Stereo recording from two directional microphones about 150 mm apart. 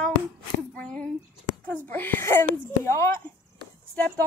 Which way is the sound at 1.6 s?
10° left (ahead or behind).